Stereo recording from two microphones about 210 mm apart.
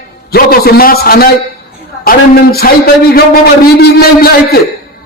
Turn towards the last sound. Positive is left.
turn(degrees=45)  # may be behind; listen again after turning